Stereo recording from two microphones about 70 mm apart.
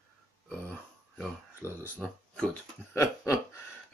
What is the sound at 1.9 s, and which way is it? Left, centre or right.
Speech, centre.